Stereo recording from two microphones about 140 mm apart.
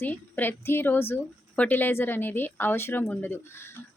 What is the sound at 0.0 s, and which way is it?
A woman's voice, 15° left (ahead or behind).